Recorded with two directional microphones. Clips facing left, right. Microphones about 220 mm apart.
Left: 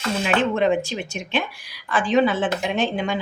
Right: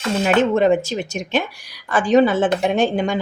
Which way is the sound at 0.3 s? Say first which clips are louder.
Right 4 dB; 40° right (ahead or behind).